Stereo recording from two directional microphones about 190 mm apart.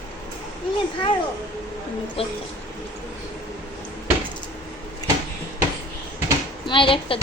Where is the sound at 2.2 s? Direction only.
30° left (ahead or behind).